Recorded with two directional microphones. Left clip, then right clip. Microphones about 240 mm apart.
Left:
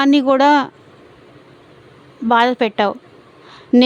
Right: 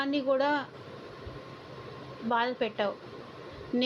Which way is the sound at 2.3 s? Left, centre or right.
Left.